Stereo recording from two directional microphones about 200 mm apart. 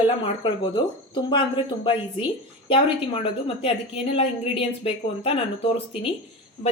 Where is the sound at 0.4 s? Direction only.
25° left (ahead or behind).